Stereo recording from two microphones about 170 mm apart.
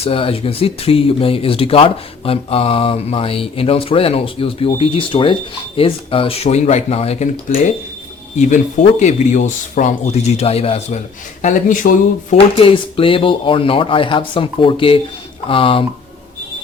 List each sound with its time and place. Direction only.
0.0 s speech: 35° left (ahead or behind)
8.4 s speech: 45° left (ahead or behind)
12.5 s speech: 30° left (ahead or behind)